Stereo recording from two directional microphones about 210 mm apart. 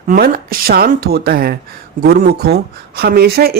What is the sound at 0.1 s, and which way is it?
Speech, 45° right (ahead or behind).